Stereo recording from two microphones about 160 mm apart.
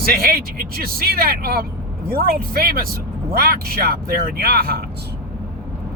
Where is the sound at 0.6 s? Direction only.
70° right (ahead or behind).